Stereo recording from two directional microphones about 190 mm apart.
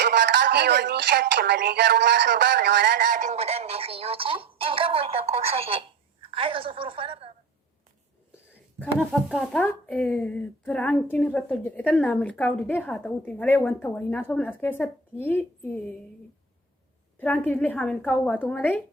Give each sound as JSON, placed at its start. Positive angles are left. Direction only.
{"t": 0.0, "sound": "speech", "side_deg": -65}
{"t": 3.1, "sound": "speech", "side_deg": -40}
{"t": 8.8, "sound": "speech", "side_deg": 5}
{"t": 17.2, "sound": "speech", "side_deg": 10}